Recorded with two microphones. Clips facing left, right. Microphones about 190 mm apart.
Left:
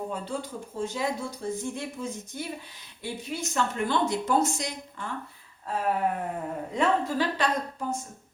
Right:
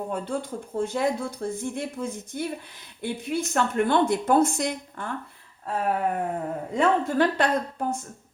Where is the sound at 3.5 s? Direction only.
55° right (ahead or behind).